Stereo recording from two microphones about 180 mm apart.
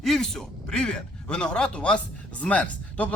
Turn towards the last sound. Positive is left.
turn(degrees=10)  # may be behind; listen again after turning